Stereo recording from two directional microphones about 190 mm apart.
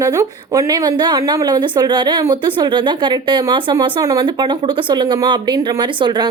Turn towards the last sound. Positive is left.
turn(degrees=-25)  # may be behind; listen again after turning